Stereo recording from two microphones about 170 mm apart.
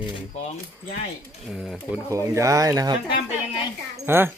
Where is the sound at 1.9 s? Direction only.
20° right (ahead or behind).